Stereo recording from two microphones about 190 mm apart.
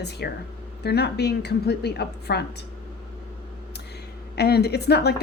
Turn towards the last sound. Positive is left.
turn(degrees=60)  # may be behind; listen again after turning